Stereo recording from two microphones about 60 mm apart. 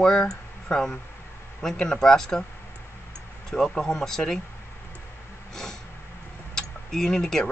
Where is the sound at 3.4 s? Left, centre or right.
Centre.